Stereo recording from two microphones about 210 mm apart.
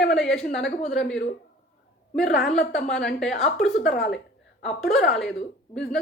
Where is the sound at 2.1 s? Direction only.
Centre (ahead or behind).